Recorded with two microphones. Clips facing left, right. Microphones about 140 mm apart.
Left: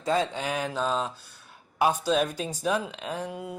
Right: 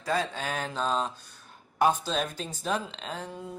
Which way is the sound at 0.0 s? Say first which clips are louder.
Left 3 dB; 20° left (ahead or behind).